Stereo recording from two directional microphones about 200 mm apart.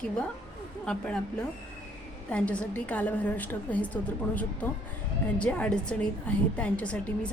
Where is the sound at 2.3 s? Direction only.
5° left (ahead or behind).